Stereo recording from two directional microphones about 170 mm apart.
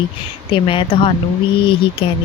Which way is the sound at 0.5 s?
30° left (ahead or behind).